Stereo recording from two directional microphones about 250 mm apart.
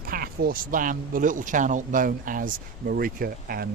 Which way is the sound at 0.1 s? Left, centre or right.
Right.